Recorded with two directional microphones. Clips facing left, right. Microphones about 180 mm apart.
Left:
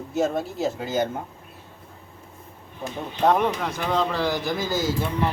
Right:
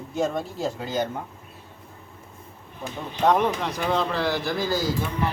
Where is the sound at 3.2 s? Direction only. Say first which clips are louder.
Even; centre (ahead or behind).